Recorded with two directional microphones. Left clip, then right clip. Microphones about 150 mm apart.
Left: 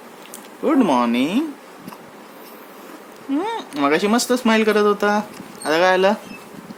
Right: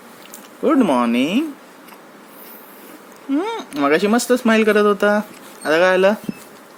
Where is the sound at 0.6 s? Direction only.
20° right (ahead or behind).